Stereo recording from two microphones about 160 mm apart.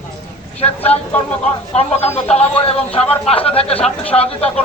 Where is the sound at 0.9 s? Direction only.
40° left (ahead or behind).